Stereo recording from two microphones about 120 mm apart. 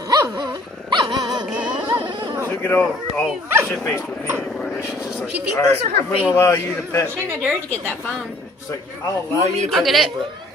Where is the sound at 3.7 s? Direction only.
15° left (ahead or behind).